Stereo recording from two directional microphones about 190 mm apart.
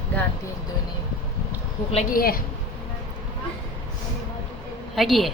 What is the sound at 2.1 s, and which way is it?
Speech, 50° left (ahead or behind).